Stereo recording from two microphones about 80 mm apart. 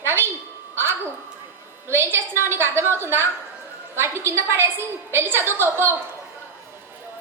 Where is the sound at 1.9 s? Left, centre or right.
Right.